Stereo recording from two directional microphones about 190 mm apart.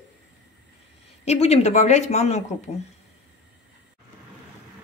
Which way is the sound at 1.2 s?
35° left (ahead or behind).